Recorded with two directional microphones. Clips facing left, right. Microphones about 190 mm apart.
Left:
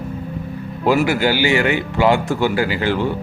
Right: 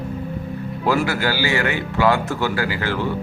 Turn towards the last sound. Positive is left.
turn(degrees=20)  # may be behind; listen again after turning